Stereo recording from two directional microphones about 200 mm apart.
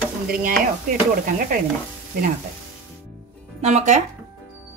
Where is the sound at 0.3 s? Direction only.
45° right (ahead or behind).